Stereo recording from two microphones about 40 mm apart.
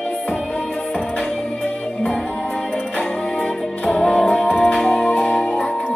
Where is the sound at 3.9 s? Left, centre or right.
Centre.